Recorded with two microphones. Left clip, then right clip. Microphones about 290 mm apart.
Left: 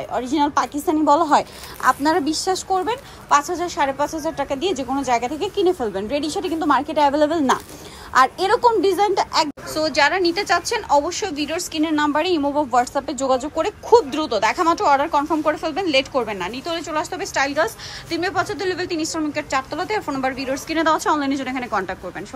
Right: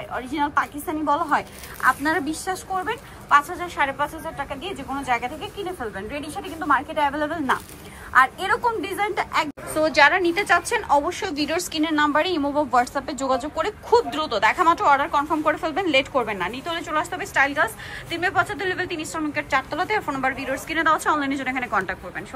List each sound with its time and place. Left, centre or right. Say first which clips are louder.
0.1 s a woman's voice: left 4 dB; centre
6.7 s a woman's voice: left 3 dB; centre